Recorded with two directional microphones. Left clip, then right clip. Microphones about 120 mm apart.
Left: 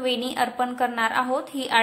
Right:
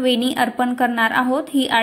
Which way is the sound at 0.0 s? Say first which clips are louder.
Right 6 dB; 25° right (ahead or behind).